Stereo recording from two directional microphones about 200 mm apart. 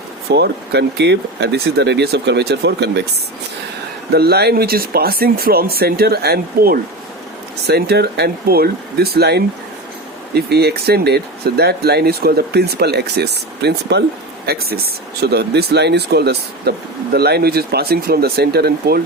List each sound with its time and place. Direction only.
0.3 s speech: 55° right (ahead or behind)
4.1 s speech: 55° right (ahead or behind)